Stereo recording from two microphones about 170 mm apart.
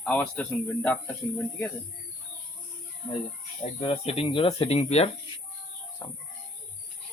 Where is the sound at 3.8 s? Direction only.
30° left (ahead or behind).